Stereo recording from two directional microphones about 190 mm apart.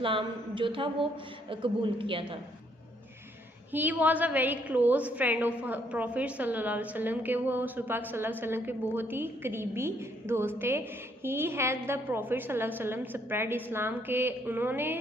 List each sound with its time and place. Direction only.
0.0 s a woman's voice: 25° right (ahead or behind)
3.7 s a woman's voice: 10° right (ahead or behind)